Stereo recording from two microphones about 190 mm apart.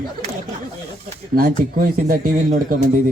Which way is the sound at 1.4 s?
50° right (ahead or behind).